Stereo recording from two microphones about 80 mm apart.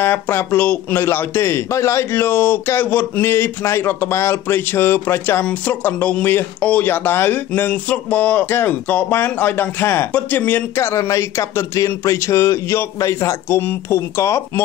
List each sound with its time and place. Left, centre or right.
0.0 s speech: left
13.6 s speech: left